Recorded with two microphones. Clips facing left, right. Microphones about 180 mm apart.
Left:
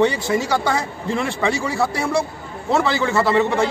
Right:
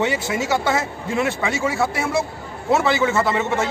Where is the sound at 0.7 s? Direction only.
5° right (ahead or behind).